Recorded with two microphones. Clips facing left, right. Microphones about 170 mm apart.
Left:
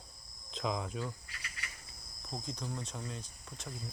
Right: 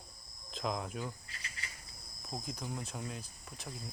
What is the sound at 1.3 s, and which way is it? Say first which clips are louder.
Insect: even; 35° right (ahead or behind).